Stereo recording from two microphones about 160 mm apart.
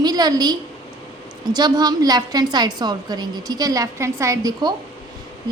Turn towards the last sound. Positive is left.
turn(degrees=-25)  # may be behind; listen again after turning